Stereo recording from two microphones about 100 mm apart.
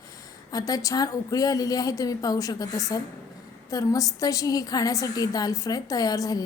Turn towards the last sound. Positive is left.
turn(degrees=35)  # may be behind; listen again after turning